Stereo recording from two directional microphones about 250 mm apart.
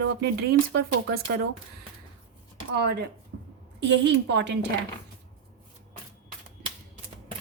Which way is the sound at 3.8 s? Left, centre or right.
Right.